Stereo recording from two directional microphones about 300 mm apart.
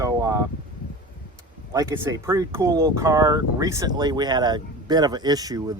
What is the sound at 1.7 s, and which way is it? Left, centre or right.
Speech, centre.